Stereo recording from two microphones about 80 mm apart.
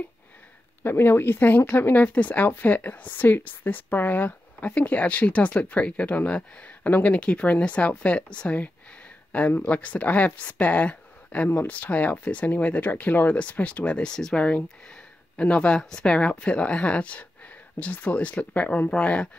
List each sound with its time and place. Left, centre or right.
0.8 s a woman's voice: left